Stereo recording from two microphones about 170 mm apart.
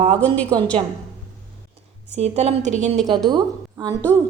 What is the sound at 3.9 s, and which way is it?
Speech, 10° left (ahead or behind).